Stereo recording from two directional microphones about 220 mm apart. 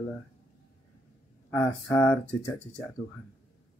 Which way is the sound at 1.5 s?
10° left (ahead or behind).